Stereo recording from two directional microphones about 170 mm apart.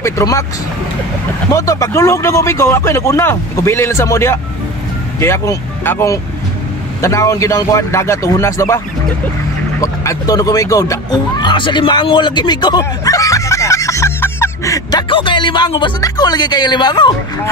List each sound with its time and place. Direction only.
0.0 s speech: 20° left (ahead or behind)
1.5 s speech: 20° left (ahead or behind)